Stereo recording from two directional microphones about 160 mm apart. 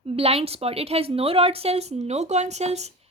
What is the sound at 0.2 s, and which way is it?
Speech, 40° right (ahead or behind).